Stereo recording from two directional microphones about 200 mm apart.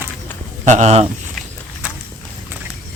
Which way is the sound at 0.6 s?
35° right (ahead or behind).